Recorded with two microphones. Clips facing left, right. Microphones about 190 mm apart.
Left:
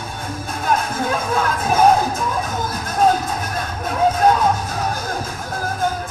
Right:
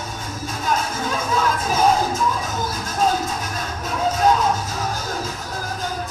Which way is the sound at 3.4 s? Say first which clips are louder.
Left 3 dB; 55° left (ahead or behind).